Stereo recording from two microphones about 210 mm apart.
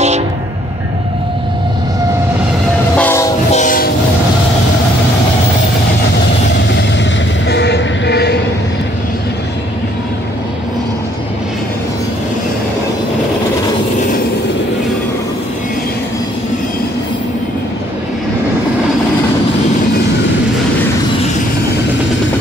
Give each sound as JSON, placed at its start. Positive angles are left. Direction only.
{"t": 3.0, "sound": "train", "side_deg": 10}
{"t": 3.5, "sound": "train", "side_deg": 40}
{"t": 7.4, "sound": "train", "side_deg": 55}